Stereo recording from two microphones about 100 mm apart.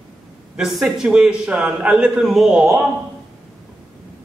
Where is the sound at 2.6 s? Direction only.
15° right (ahead or behind).